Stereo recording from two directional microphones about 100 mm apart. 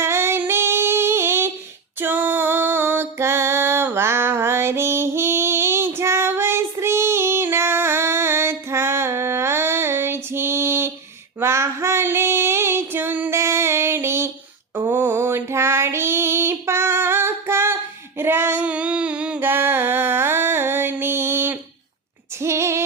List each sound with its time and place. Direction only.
0.0 s humming: 25° right (ahead or behind)
2.0 s music: 20° right (ahead or behind)
11.3 s female singing: 25° right (ahead or behind); by 19.4 s 10° right (ahead or behind)
19.4 s a sound: 20° right (ahead or behind)
22.4 s female singing: 30° right (ahead or behind)